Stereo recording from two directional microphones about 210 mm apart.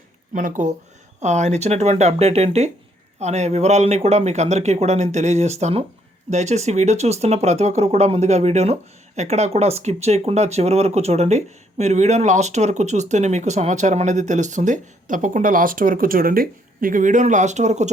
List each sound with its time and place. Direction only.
0.3 s speech: 35° right (ahead or behind)